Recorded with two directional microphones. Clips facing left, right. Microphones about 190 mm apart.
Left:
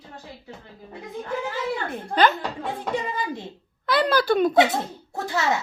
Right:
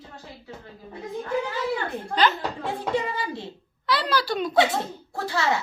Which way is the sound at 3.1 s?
15° left (ahead or behind).